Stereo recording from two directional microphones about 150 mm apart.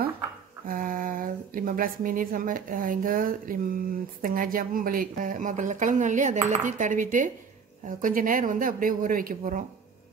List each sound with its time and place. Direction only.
0.7 s speech: 65° right (ahead or behind)